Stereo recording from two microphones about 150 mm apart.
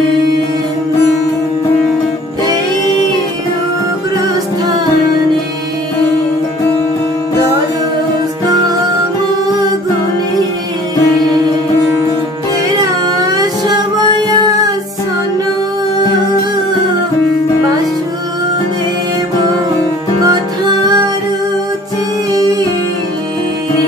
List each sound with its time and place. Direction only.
4.2 s music: 25° right (ahead or behind)
12.6 s music: 25° right (ahead or behind)
20.2 s music: 25° right (ahead or behind)
22.3 s music: 25° right (ahead or behind)